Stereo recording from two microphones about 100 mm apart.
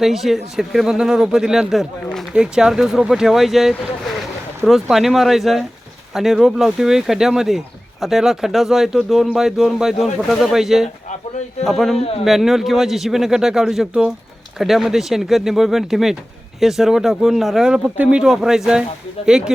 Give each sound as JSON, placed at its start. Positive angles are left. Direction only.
{"t": 0.0, "sound": "speech", "side_deg": 0}
{"t": 11.9, "sound": "a man's voice", "side_deg": 75}
{"t": 12.2, "sound": "speech", "side_deg": 0}